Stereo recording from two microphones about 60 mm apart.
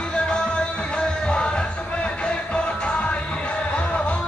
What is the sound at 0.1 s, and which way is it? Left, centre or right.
Music, centre.